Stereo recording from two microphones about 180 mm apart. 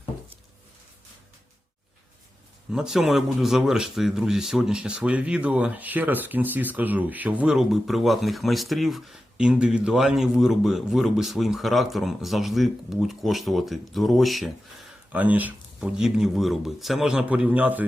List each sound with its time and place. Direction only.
2.7 s speech: centre (ahead or behind)